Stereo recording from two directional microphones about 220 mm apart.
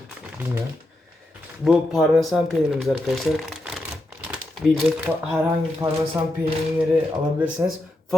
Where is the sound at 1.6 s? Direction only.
Centre (ahead or behind).